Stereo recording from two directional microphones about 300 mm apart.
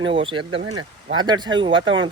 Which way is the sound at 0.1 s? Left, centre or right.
Centre.